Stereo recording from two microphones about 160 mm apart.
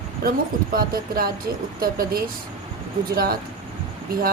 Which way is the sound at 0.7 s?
65° right (ahead or behind).